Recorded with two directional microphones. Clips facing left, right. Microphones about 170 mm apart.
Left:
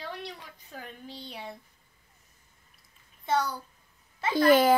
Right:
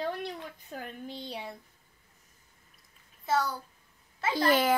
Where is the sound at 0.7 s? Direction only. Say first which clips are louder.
Right 1 dB; 50° right (ahead or behind).